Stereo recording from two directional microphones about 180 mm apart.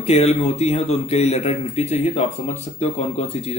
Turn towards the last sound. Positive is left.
turn(degrees=35)  # may be behind; listen again after turning